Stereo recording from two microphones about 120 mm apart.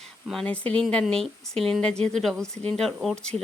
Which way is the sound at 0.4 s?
10° left (ahead or behind).